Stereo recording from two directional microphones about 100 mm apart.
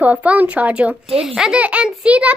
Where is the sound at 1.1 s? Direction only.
70° right (ahead or behind).